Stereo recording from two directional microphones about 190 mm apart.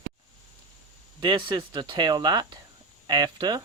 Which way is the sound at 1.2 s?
25° right (ahead or behind).